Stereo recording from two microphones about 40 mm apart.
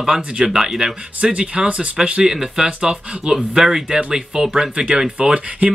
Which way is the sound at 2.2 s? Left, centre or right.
Centre.